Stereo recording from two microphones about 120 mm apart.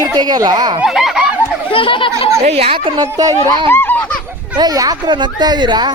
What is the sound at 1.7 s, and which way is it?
Speech, 45° left (ahead or behind).